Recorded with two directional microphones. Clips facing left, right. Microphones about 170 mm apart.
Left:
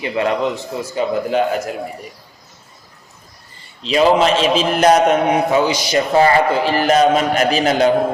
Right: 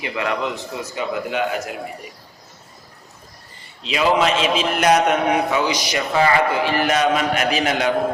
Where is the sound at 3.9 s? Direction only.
35° left (ahead or behind).